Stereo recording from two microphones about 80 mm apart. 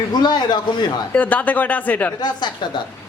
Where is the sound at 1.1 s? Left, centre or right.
Centre.